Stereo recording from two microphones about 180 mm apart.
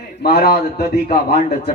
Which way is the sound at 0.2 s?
60° left (ahead or behind).